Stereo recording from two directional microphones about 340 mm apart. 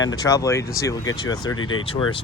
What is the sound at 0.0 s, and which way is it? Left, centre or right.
Speech, centre.